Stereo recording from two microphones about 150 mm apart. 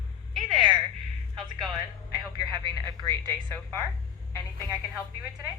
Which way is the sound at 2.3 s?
30° right (ahead or behind).